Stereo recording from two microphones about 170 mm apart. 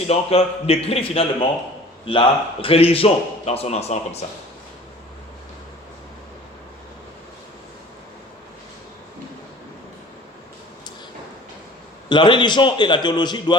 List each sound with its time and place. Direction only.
0.1 s speech: 35° left (ahead or behind)
12.0 s a man's voice: 25° left (ahead or behind)